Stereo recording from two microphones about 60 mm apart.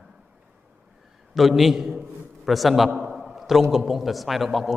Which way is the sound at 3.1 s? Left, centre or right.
Centre.